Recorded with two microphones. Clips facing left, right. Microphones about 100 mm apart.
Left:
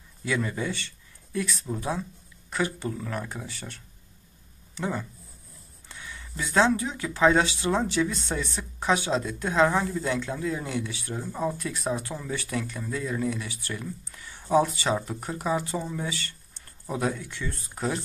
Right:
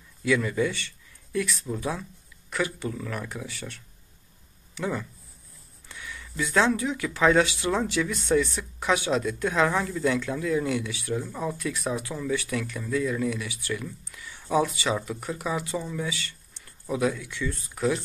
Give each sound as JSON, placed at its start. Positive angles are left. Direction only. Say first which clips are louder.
{"t": 0.2, "sound": "speech", "louder": "right 5 dB", "side_deg": 30}